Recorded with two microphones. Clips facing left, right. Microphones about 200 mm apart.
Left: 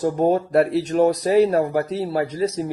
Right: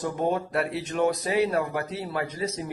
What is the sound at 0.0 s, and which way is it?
Speech, 40° left (ahead or behind).